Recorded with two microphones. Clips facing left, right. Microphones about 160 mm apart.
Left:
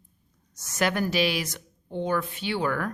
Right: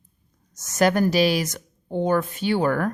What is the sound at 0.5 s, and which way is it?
A woman's voice, 45° right (ahead or behind).